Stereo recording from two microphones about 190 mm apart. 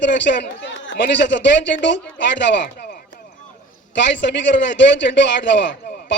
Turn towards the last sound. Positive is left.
turn(degrees=70)  # may be behind; listen again after turning